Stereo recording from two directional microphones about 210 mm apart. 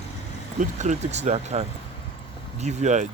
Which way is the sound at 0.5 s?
35° right (ahead or behind).